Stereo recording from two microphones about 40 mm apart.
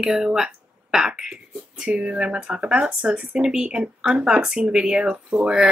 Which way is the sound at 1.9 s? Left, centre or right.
Right.